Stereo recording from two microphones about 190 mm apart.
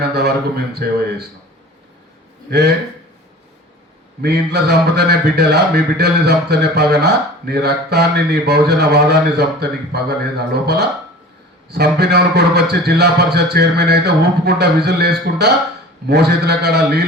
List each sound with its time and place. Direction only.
0.0 s a man's voice: 55° right (ahead or behind)
2.5 s a man's voice: 60° right (ahead or behind)
4.2 s a man's voice: 60° right (ahead or behind)